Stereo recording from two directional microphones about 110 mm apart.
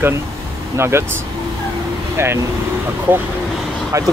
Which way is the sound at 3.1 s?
15° right (ahead or behind).